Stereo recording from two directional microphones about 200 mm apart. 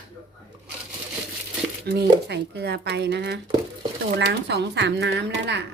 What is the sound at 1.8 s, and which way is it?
Speech, 55° right (ahead or behind).